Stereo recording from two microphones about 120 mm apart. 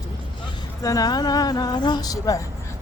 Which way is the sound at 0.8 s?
30° left (ahead or behind).